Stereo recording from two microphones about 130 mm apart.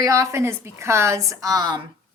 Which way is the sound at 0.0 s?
25° right (ahead or behind).